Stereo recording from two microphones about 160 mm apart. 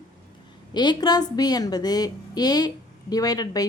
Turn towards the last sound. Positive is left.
turn(degrees=25)  # may be behind; listen again after turning